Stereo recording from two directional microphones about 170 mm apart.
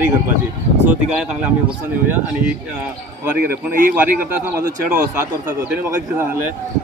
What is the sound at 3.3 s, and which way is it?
Speech, 55° right (ahead or behind).